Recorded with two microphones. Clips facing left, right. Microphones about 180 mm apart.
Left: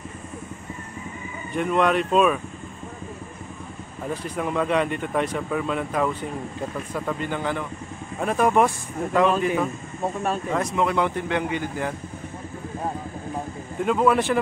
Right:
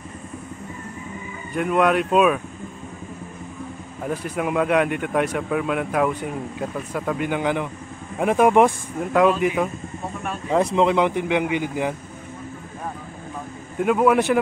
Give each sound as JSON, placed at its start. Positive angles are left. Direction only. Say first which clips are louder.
{"t": 1.5, "sound": "speech", "louder": "right 2 dB", "side_deg": -5}
{"t": 4.0, "sound": "speech", "louder": "right 3 dB", "side_deg": -10}
{"t": 10.5, "sound": "speech", "louder": "right 7 dB", "side_deg": -30}
{"t": 13.7, "sound": "speech", "louder": "right 3 dB", "side_deg": -10}